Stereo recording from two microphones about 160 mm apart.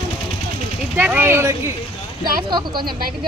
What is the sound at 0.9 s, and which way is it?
Speech, 10° right (ahead or behind).